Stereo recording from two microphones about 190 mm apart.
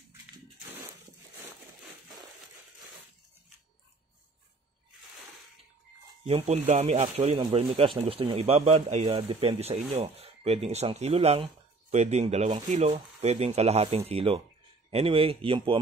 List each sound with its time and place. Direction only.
6.2 s speech: 35° right (ahead or behind)